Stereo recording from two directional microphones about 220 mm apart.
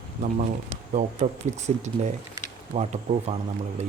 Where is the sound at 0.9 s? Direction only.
30° right (ahead or behind).